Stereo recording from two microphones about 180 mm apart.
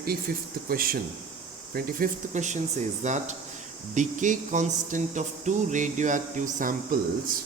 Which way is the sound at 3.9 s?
45° right (ahead or behind).